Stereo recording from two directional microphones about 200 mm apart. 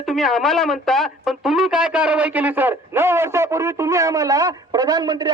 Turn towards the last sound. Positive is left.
turn(degrees=-20)  # may be behind; listen again after turning